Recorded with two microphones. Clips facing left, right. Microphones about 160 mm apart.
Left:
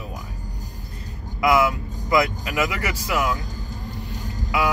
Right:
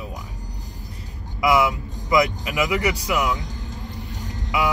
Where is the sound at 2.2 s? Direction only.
15° right (ahead or behind).